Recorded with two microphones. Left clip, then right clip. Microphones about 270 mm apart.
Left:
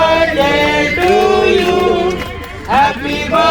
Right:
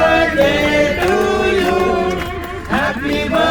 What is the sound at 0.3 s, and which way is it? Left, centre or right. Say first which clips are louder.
Male singing: left 1 dB; centre.